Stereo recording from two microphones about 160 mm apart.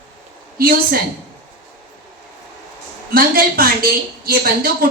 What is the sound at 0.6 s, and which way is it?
Speech, 65° right (ahead or behind).